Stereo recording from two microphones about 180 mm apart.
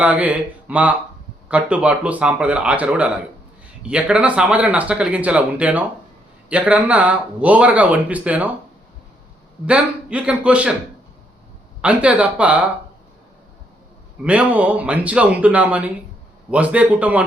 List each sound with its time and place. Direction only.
0.0 s speech: 10° right (ahead or behind)
9.6 s speech: 5° right (ahead or behind)
11.8 s speech: 5° right (ahead or behind)
14.3 s speech: 5° right (ahead or behind)